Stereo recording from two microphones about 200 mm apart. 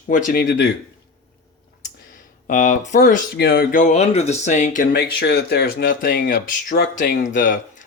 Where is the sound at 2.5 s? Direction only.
35° left (ahead or behind).